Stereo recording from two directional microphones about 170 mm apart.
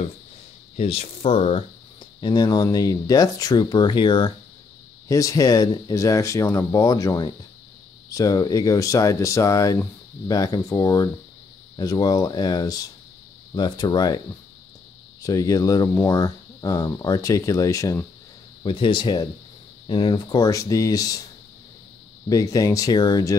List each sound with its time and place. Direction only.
0.7 s speech: 35° left (ahead or behind)
15.2 s speech: 20° left (ahead or behind)
22.3 s speech: 20° left (ahead or behind)